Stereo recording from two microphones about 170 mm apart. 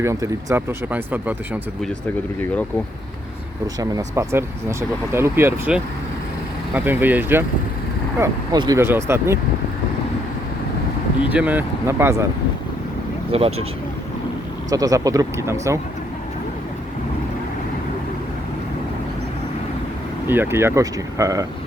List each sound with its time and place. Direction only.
0.0 s speech: 20° right (ahead or behind)
3.8 s speech: 20° right (ahead or behind)
8.2 s speech: 20° right (ahead or behind)
11.3 s speech: 10° right (ahead or behind)
13.3 s speech: 35° right (ahead or behind)
14.7 s speech: 20° right (ahead or behind)
20.2 s speech: 10° right (ahead or behind)